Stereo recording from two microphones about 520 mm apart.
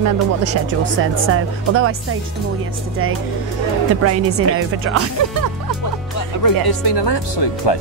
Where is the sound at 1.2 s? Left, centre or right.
Right.